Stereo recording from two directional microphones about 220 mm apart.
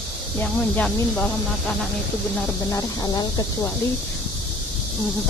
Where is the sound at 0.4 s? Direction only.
5° left (ahead or behind).